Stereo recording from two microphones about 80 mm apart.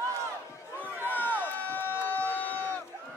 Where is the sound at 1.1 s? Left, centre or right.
Left.